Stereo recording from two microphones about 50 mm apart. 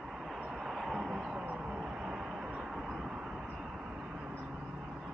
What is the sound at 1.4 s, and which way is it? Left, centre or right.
Vehicle, right.